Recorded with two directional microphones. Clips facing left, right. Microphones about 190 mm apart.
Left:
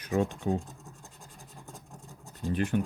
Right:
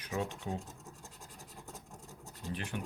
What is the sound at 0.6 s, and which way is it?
Scratch, centre (ahead or behind).